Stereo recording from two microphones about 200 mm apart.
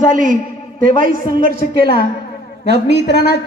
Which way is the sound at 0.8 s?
45° right (ahead or behind).